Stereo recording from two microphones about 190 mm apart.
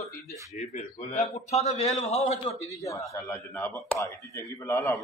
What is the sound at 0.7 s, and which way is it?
A man's voice, 35° left (ahead or behind).